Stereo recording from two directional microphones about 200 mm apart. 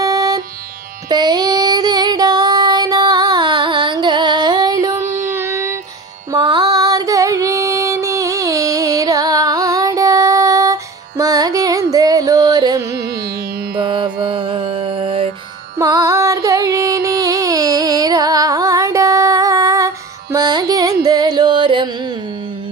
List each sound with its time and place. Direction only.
0.0 s music: 20° right (ahead or behind)
1.0 s female singing: 20° right (ahead or behind)
5.0 s a sound: 40° right (ahead or behind)
5.3 s child singing: 15° right (ahead or behind)
6.3 s female singing: 20° right (ahead or behind)
13.7 s mantra: 25° right (ahead or behind)
15.8 s carnatic music: 15° right (ahead or behind)